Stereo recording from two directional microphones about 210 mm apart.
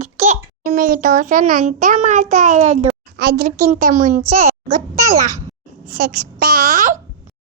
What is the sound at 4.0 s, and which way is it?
Speech, 40° right (ahead or behind).